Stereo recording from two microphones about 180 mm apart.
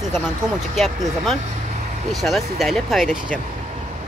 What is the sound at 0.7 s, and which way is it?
Speech, centre (ahead or behind).